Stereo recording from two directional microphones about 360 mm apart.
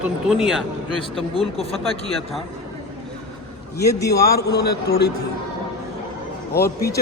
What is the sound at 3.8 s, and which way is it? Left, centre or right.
Speech, centre.